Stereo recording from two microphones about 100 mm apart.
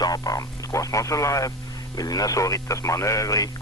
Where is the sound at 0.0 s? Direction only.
40° left (ahead or behind).